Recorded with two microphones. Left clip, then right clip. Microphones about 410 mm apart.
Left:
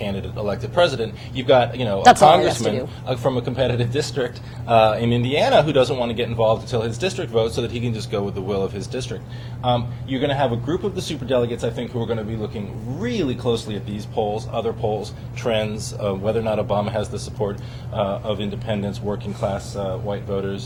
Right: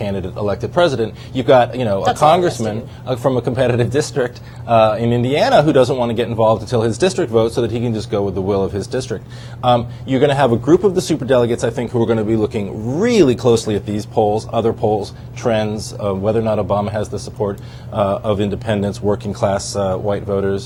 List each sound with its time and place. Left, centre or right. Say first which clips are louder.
0.0 s a man's voice: right 5 dB; right
2.0 s speech: left 9 dB; left
2.2 s speech: right 1 dB; right
3.1 s a man's voice: right 6 dB; right
17.9 s a man's voice: right 6 dB; right